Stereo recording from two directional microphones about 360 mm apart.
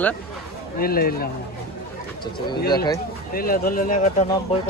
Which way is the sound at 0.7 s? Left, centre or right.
Left.